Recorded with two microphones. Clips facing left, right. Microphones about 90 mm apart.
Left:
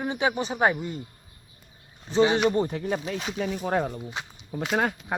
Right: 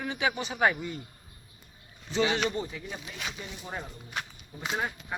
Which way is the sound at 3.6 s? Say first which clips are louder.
Left 13 dB; 80° left.